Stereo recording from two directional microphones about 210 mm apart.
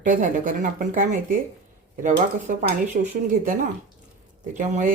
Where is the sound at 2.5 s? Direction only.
40° right (ahead or behind).